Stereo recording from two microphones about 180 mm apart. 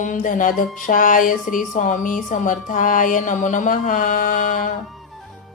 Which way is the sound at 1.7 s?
45° left (ahead or behind).